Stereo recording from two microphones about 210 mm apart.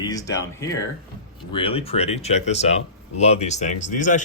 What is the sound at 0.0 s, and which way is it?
Speech, 15° left (ahead or behind).